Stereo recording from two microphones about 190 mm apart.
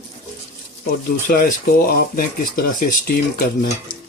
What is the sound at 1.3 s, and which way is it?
Speech, 50° left (ahead or behind).